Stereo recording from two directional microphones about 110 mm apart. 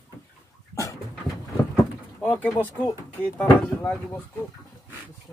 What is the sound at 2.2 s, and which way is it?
Speech, 20° left (ahead or behind).